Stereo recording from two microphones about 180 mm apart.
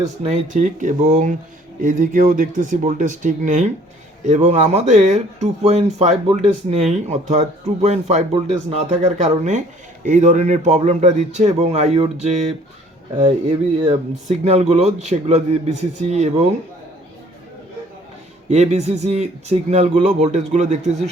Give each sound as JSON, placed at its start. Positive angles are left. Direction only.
{"t": 0.2, "sound": "speech", "side_deg": -40}
{"t": 14.3, "sound": "speech", "side_deg": -40}
{"t": 18.4, "sound": "speech", "side_deg": -40}